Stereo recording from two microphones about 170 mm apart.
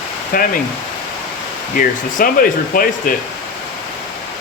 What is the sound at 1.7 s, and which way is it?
Speech, 55° left (ahead or behind).